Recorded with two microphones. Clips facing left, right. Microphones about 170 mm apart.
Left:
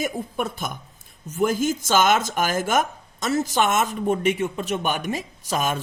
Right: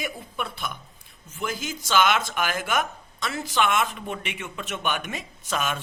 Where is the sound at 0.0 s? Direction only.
45° left (ahead or behind).